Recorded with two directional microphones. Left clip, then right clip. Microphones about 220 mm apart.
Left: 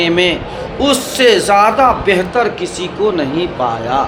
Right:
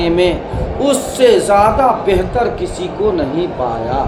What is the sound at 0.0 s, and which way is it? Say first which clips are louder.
Speech: left 1 dB; 30° left (ahead or behind).